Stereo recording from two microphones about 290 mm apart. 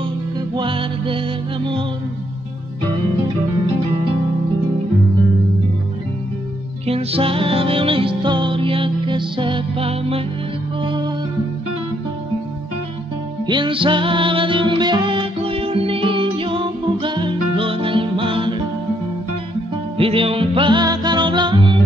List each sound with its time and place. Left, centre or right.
0.6 s music: centre
6.9 s music: centre
13.5 s music: centre
20.0 s music: centre